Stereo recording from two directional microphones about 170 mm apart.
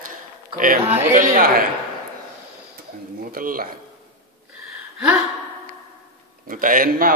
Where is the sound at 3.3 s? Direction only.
55° right (ahead or behind).